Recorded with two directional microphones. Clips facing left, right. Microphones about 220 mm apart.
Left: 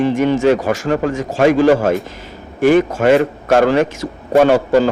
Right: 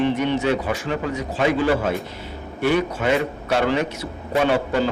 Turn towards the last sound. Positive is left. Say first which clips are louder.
# left 8 dB
turn(degrees=45)  # may be behind; listen again after turning